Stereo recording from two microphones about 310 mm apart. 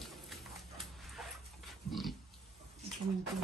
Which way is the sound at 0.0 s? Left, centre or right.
Centre.